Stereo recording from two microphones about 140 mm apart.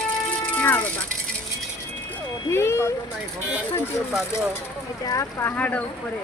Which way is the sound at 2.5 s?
20° left (ahead or behind).